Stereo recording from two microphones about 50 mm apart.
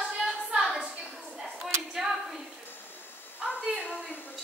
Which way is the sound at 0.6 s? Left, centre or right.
Centre.